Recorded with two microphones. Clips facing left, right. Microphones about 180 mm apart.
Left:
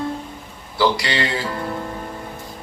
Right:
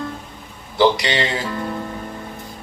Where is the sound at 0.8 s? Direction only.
20° right (ahead or behind).